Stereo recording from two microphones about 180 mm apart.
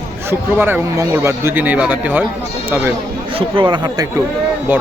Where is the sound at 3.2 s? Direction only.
30° right (ahead or behind).